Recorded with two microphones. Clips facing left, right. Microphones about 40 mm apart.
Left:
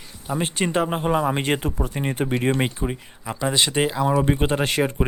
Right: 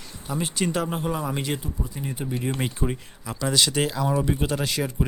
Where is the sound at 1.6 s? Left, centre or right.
Left.